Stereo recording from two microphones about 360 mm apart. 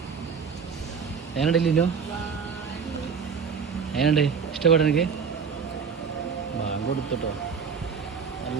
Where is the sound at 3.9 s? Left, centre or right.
Centre.